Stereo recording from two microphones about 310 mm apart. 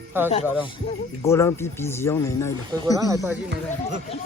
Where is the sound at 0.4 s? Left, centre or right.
Centre.